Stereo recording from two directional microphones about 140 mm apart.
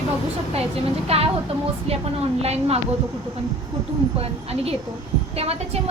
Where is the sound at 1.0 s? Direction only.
45° right (ahead or behind).